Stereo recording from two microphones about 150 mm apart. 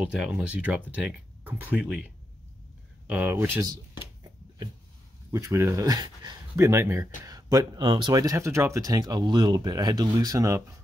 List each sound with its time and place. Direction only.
0.0 s speech: 5° right (ahead or behind)
5.3 s speech: 20° right (ahead or behind)